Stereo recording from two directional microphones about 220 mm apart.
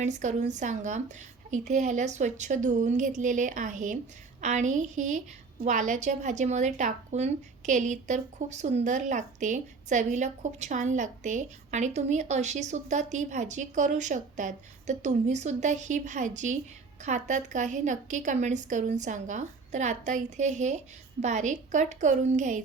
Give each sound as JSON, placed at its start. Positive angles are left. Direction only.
{"t": 0.0, "sound": "a woman's voice", "side_deg": -35}